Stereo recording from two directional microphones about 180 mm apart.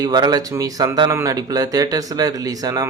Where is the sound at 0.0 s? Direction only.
20° right (ahead or behind).